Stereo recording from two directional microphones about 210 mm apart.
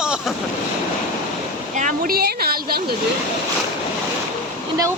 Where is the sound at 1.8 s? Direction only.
40° right (ahead or behind).